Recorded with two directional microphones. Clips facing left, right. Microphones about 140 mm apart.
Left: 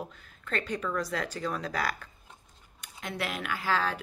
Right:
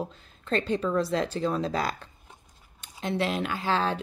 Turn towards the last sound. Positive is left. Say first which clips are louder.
# right 3 dB
turn(degrees=-25)  # may be behind; listen again after turning